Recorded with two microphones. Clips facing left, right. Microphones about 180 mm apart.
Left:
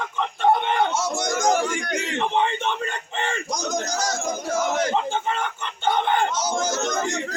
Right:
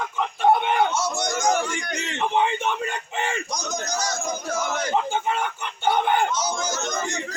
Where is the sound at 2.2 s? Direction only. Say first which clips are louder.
Right 2 dB; 5° right (ahead or behind).